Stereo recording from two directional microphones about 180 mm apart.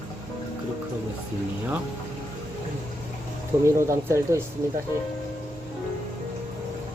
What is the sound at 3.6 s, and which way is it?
Speech, 15° right (ahead or behind).